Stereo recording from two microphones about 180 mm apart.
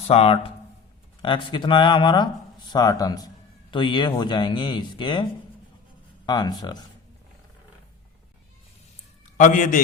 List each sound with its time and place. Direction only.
0.1 s speech: 35° left (ahead or behind)
6.2 s speech: 25° left (ahead or behind)
9.4 s a man's voice: 45° left (ahead or behind)